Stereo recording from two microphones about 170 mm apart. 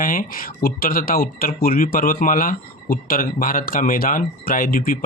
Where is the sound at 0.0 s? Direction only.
55° left (ahead or behind).